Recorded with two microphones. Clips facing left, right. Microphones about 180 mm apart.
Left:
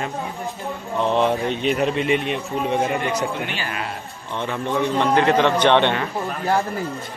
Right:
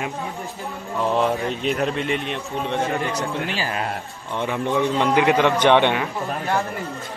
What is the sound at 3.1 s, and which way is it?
Speech, 35° right (ahead or behind).